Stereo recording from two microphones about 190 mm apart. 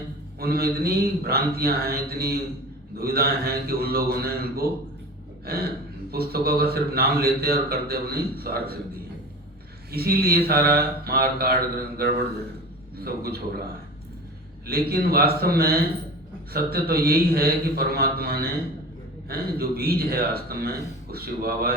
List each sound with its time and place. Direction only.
0.3 s a man's voice: 55° right (ahead or behind)
9.9 s a man's voice: 55° right (ahead or behind)
14.7 s a man's voice: 55° right (ahead or behind)